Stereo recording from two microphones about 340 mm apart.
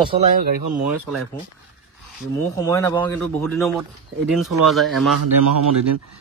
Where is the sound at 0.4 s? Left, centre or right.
Right.